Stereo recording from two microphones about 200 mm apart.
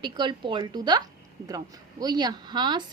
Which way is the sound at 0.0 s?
25° right (ahead or behind).